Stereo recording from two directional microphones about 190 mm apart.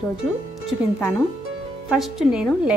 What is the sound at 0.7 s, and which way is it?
A woman's voice, centre (ahead or behind).